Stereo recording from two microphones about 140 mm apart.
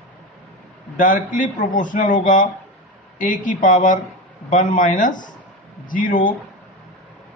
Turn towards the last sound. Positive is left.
turn(degrees=75)  # may be behind; listen again after turning